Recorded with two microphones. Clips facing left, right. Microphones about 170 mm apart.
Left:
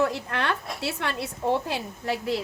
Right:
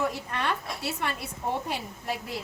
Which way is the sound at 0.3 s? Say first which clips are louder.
Left 2 dB; 80° left.